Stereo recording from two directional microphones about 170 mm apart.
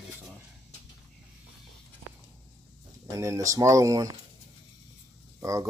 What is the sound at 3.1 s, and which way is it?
Speech, 20° right (ahead or behind).